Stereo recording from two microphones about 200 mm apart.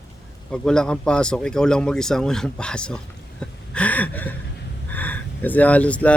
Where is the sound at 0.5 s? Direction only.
5° left (ahead or behind).